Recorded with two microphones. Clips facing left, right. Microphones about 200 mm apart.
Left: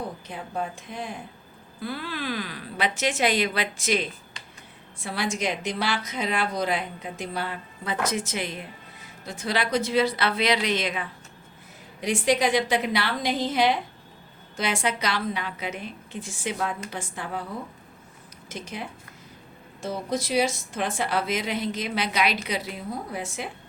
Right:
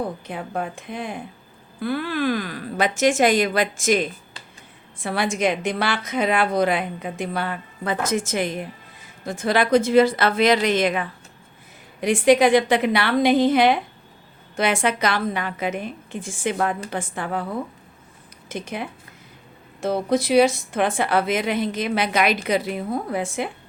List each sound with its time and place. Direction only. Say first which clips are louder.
0.3 s a woman's voice: right 4 dB; 60° right (ahead or behind)
18.4 s a woman's voice: right 6 dB; 55° right (ahead or behind)